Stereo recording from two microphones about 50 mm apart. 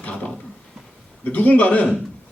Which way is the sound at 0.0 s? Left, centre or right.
Left.